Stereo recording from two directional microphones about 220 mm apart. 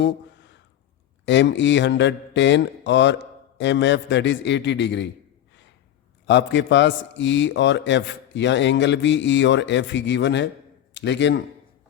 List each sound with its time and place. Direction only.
1.2 s speech: 55° left (ahead or behind)
6.2 s a man's voice: 55° left (ahead or behind)